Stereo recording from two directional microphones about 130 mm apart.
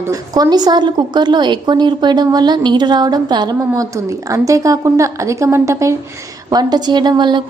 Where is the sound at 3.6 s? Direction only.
20° right (ahead or behind).